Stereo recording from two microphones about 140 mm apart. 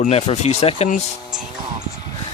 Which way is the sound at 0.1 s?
50° left (ahead or behind).